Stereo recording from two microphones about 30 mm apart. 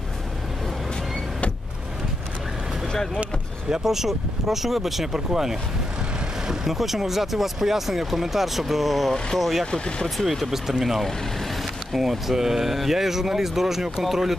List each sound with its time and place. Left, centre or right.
3.8 s speech: centre
9.7 s speech: left
10.1 s speech: centre
10.5 s speech: centre
11.0 s vehicle: centre
12.1 s speech: centre